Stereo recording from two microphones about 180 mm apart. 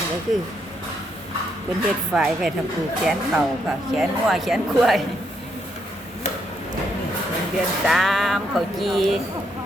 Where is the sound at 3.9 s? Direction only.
Centre (ahead or behind).